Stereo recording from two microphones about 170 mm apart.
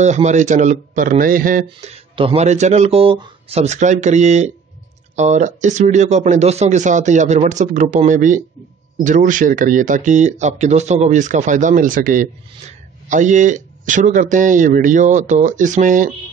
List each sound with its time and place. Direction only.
0.0 s speech: 45° right (ahead or behind)
1.9 s speech: 35° right (ahead or behind); by 16.1 s 50° right (ahead or behind)